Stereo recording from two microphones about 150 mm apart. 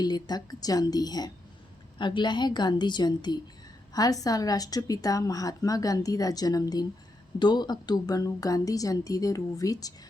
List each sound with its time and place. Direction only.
0.0 s a woman's voice: 25° left (ahead or behind)